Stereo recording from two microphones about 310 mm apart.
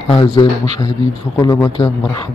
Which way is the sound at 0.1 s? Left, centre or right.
Centre.